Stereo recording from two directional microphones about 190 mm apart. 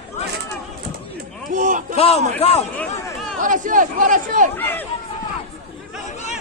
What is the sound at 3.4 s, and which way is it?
Speech, 45° right (ahead or behind).